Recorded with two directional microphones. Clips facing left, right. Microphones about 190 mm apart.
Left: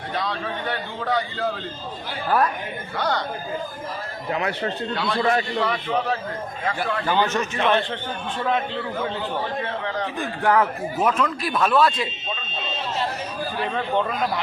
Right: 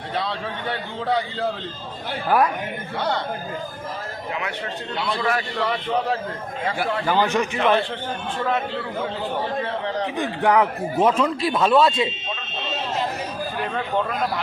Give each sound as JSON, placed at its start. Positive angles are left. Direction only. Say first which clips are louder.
{"t": 0.2, "sound": "a man's voice", "louder": "even", "side_deg": -25}
{"t": 2.3, "sound": "a man's voice", "louder": "right 2 dB", "side_deg": -10}
{"t": 3.0, "sound": "a man's voice", "louder": "even", "side_deg": -25}
{"t": 4.3, "sound": "speech", "louder": "left 5 dB", "side_deg": 40}
{"t": 5.2, "sound": "a man's voice", "louder": "left 4 dB", "side_deg": 25}
{"t": 6.7, "sound": "a man's voice", "louder": "right 1 dB", "side_deg": -5}
{"t": 10.2, "sound": "a man's voice", "louder": "right 1 dB", "side_deg": -15}
{"t": 11.1, "sound": "a man's voice", "louder": "right 3 dB", "side_deg": -25}
{"t": 13.7, "sound": "speech", "louder": "even", "side_deg": 0}